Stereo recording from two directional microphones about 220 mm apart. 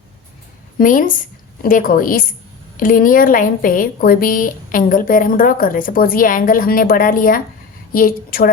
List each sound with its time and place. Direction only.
0.8 s a woman's voice: 35° left (ahead or behind)